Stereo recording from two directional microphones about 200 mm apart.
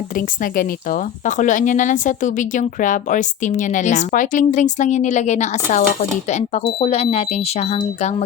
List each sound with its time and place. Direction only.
0.5 s speech: 45° left (ahead or behind)